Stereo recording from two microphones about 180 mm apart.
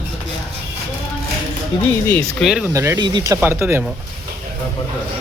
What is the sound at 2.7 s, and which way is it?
Speech, 15° right (ahead or behind).